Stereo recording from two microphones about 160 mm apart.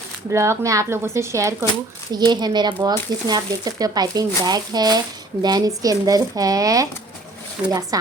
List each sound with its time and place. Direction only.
0.3 s speech: 15° right (ahead or behind)